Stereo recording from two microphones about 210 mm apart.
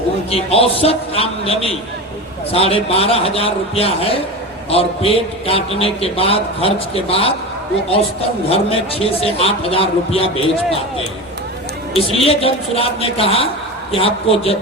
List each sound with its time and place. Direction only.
0.3 s a man's voice: 30° left (ahead or behind)
8.4 s a man's voice: 30° left (ahead or behind)
11.9 s a man's voice: 25° left (ahead or behind)